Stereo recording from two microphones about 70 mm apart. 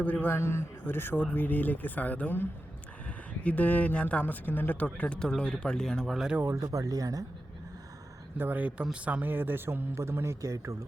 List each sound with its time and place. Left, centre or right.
0.0 s speech: left
0.3 s speech: left; by 6.1 s centre
6.6 s speech: right
8.4 s a man's voice: right